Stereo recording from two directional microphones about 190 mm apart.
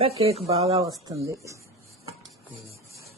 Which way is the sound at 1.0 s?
15° right (ahead or behind).